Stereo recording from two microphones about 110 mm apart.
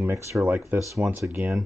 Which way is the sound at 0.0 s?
25° right (ahead or behind).